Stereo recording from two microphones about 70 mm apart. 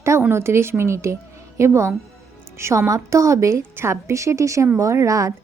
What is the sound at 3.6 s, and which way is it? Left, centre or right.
A woman's voice, right.